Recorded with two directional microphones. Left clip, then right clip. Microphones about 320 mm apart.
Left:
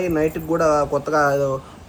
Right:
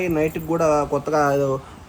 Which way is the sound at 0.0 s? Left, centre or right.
Right.